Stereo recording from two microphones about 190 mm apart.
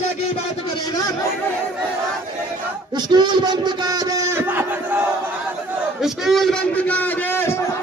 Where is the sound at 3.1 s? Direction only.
25° right (ahead or behind).